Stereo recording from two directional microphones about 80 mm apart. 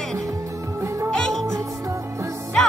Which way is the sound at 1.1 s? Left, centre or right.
Centre.